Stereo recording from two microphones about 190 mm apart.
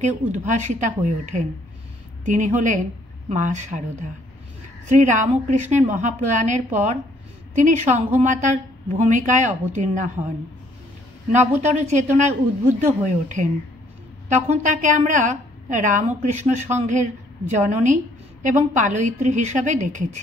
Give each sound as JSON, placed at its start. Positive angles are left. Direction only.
{"t": 0.0, "sound": "a woman's voice", "side_deg": -40}
{"t": 4.8, "sound": "a woman's voice", "side_deg": -40}
{"t": 11.6, "sound": "a woman's voice", "side_deg": -40}